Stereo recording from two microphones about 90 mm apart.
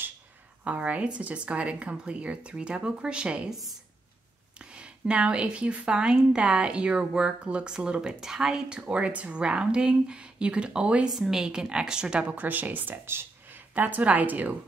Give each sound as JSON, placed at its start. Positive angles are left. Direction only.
{"t": 0.7, "sound": "a woman's voice", "side_deg": -15}